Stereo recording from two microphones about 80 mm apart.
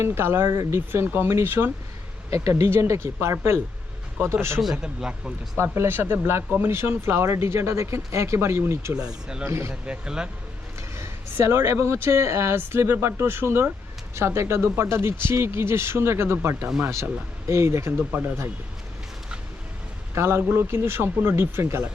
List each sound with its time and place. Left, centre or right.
0.0 s speech: right
4.6 s speech: centre
5.6 s speech: right
9.0 s speech: centre
9.4 s speech: right
9.8 s speech: centre
10.8 s speech: right
20.1 s speech: right